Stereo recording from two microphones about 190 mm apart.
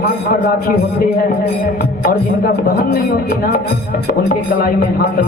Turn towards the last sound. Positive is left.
turn(degrees=50)  # may be behind; listen again after turning